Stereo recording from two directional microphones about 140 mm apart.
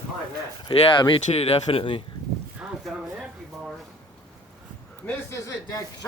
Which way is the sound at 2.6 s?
Centre (ahead or behind).